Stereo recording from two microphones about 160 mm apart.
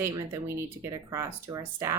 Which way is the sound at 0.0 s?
15° right (ahead or behind).